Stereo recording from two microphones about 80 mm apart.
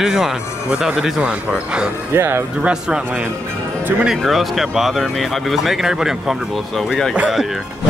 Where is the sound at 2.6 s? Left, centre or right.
Centre.